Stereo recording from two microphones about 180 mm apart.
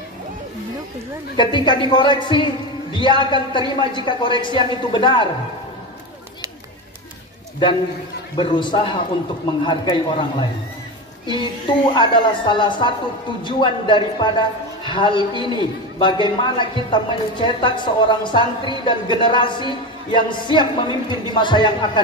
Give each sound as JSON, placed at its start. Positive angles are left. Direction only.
{"t": 1.3, "sound": "speech", "side_deg": 25}
{"t": 8.4, "sound": "speech", "side_deg": 25}